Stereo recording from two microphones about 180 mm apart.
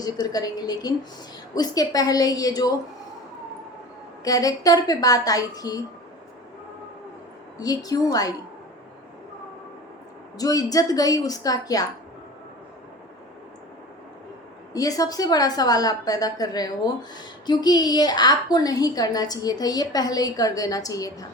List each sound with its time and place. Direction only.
0.0 s a woman's voice: 20° left (ahead or behind)
4.2 s a woman's voice: 20° left (ahead or behind)
7.6 s a woman's voice: 20° left (ahead or behind)
10.3 s a woman's voice: 20° left (ahead or behind)
14.7 s a woman's voice: 20° left (ahead or behind)